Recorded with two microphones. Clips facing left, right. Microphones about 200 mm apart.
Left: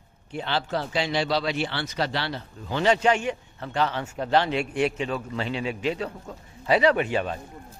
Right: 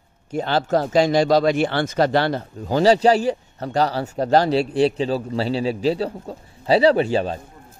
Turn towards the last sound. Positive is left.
turn(degrees=-30)  # may be behind; listen again after turning